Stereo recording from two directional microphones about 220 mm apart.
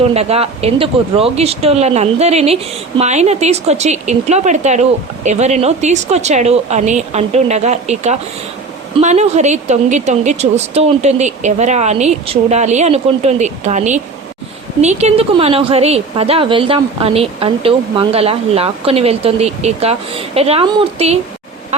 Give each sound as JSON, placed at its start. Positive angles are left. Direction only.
{"t": 0.1, "sound": "a woman's voice", "side_deg": -30}